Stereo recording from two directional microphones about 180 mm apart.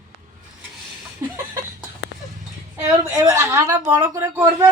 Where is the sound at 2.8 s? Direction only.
10° right (ahead or behind).